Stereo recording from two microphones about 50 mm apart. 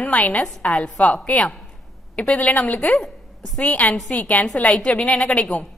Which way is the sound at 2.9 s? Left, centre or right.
Centre.